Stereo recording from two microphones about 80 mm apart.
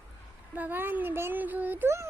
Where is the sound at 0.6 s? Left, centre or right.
Right.